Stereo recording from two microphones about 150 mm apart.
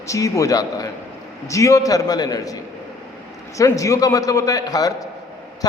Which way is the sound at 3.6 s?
20° left (ahead or behind).